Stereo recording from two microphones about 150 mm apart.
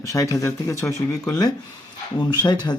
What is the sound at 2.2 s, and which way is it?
Speech, 30° left (ahead or behind).